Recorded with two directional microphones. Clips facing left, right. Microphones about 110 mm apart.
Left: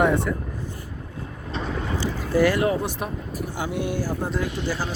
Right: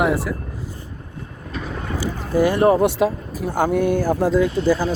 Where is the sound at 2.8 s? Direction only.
90° right.